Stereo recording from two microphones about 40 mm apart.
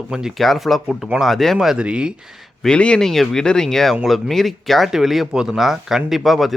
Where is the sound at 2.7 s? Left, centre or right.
Left.